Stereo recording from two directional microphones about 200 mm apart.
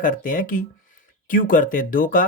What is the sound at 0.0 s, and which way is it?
Speech, 40° left (ahead or behind).